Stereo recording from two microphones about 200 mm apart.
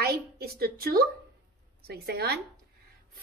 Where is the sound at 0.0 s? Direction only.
50° right (ahead or behind).